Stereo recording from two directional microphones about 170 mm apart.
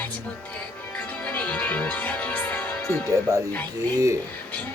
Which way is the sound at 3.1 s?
15° right (ahead or behind).